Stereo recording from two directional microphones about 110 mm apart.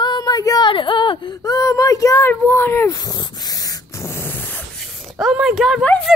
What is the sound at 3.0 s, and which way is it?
Spray, 35° left (ahead or behind).